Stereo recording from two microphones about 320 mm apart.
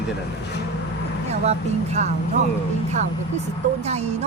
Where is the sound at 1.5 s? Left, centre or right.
Right.